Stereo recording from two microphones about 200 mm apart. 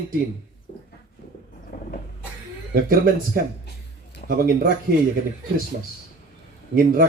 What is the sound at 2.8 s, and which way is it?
Speech, 45° right (ahead or behind).